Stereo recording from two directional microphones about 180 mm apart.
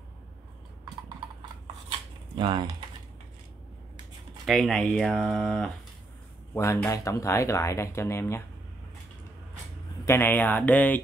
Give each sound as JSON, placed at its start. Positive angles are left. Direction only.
{"t": 1.9, "sound": "cutlery", "side_deg": -25}
{"t": 4.5, "sound": "speech", "side_deg": 0}
{"t": 6.5, "sound": "speech", "side_deg": 15}
{"t": 10.0, "sound": "speech", "side_deg": 15}